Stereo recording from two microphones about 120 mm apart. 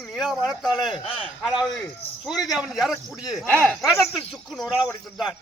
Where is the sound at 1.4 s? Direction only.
5° left (ahead or behind).